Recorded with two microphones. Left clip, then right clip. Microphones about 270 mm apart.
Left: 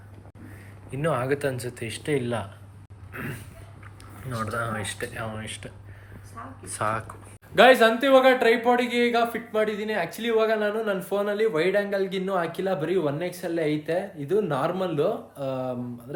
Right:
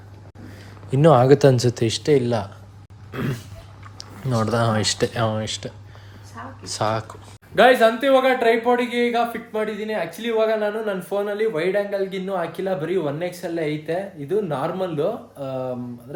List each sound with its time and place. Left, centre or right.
0.9 s speech: right
2.0 s speech: centre
4.3 s speech: centre
6.7 s speech: centre
7.5 s speech: centre